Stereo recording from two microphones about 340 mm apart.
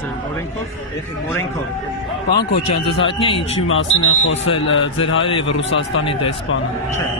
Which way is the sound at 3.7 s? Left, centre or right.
Left.